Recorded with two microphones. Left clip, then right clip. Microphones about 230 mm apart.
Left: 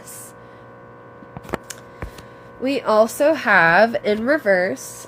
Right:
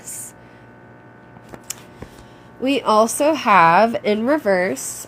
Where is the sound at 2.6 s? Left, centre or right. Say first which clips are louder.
Right 1 dB; right.